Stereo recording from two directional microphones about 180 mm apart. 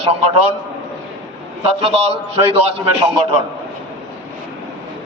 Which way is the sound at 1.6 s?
30° right (ahead or behind).